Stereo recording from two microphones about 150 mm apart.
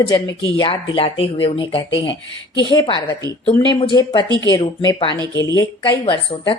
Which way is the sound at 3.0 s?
20° left (ahead or behind).